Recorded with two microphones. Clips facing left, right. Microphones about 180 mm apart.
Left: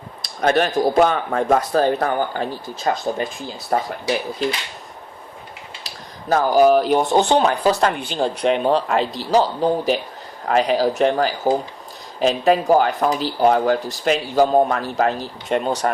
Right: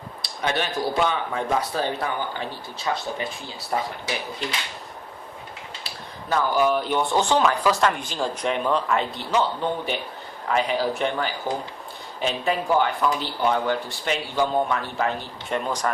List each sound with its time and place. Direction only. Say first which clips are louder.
0.2 s speech: left 8 dB; 45° left (ahead or behind)
5.8 s a sound: left 2 dB; 40° left (ahead or behind)
6.9 s speech: left 5 dB; 40° left (ahead or behind)